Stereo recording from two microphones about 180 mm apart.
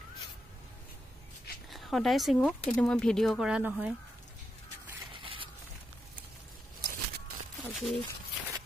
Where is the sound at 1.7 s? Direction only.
Centre (ahead or behind).